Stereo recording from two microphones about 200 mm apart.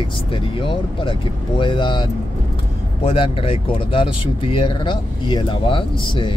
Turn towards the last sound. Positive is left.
turn(degrees=25)  # may be behind; listen again after turning